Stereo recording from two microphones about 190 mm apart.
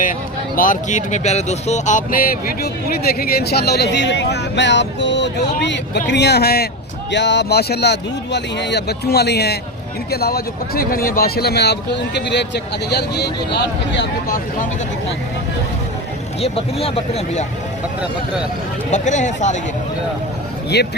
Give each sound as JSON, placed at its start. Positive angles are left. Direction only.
{"t": 0.0, "sound": "a man's voice", "side_deg": 45}
{"t": 7.1, "sound": "a man's voice", "side_deg": 65}
{"t": 16.4, "sound": "speech", "side_deg": 30}
{"t": 18.9, "sound": "speech", "side_deg": 40}
{"t": 20.7, "sound": "a man's voice", "side_deg": 60}